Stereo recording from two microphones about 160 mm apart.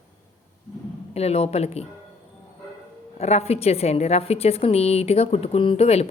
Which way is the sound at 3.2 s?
40° left (ahead or behind).